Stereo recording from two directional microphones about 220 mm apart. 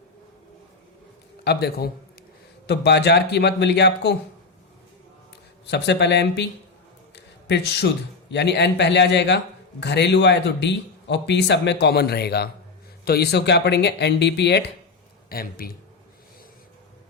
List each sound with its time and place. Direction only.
1.5 s a man's voice: 50° left (ahead or behind)
5.6 s a man's voice: 50° left (ahead or behind)
7.2 s a sound: 50° left (ahead or behind)
8.3 s a man's voice: 50° left (ahead or behind)